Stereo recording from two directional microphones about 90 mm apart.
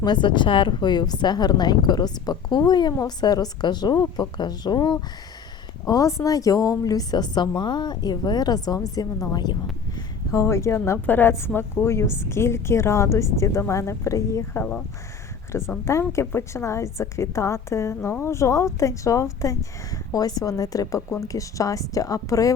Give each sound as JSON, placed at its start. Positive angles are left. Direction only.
{"t": 0.0, "sound": "a woman's voice", "side_deg": 60}
{"t": 5.8, "sound": "a woman's voice", "side_deg": 40}
{"t": 10.3, "sound": "a woman's voice", "side_deg": 35}
{"t": 15.8, "sound": "a woman's voice", "side_deg": 30}